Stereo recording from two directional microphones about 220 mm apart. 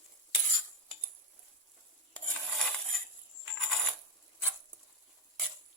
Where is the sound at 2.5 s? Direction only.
Centre (ahead or behind).